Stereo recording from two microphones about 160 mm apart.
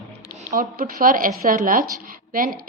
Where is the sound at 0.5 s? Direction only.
60° right (ahead or behind).